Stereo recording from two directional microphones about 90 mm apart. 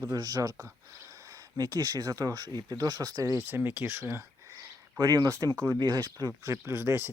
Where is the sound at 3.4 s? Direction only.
25° right (ahead or behind).